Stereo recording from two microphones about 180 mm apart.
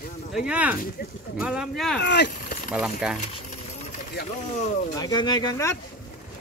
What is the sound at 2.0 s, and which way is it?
Speech, 70° left (ahead or behind).